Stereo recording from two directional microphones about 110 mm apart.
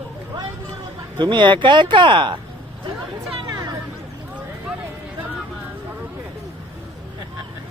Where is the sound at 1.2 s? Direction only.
45° right (ahead or behind).